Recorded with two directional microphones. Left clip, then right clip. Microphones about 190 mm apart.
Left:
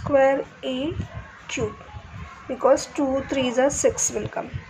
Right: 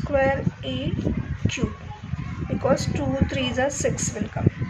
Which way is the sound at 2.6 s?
10° left (ahead or behind).